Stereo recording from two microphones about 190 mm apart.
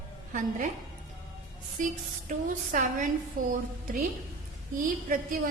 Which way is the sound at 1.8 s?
45° right (ahead or behind).